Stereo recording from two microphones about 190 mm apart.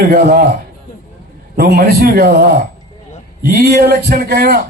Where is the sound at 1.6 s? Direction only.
55° right (ahead or behind).